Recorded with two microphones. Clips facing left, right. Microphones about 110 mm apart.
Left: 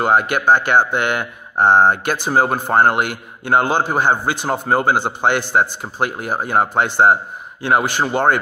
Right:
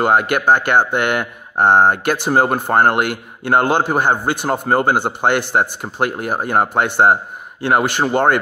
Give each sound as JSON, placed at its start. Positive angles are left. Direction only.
{"t": 0.0, "sound": "a man's voice", "side_deg": -55}